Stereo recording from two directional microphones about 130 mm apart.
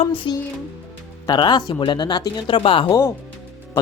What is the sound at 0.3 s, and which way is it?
Speech, 40° left (ahead or behind).